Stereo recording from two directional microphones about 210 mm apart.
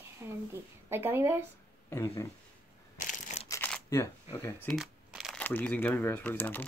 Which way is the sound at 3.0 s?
35° left (ahead or behind).